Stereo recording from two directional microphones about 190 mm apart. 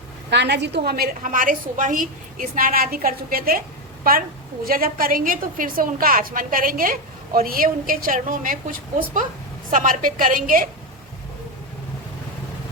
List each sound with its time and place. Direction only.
0.3 s a woman's voice: 65° right (ahead or behind); by 10.7 s 45° right (ahead or behind)